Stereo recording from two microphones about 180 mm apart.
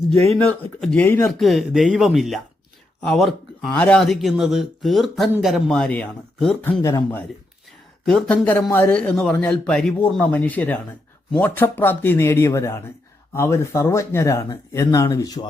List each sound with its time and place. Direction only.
0.3 s a man's voice: 5° left (ahead or behind)
1.3 s speech: centre (ahead or behind)
8.0 s a man's voice: 5° left (ahead or behind); by 15.4 s 20° left (ahead or behind)